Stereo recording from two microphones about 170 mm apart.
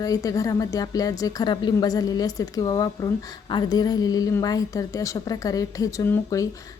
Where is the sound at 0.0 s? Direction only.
20° left (ahead or behind).